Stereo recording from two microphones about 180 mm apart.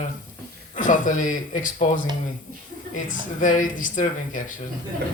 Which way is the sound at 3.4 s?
45° left (ahead or behind).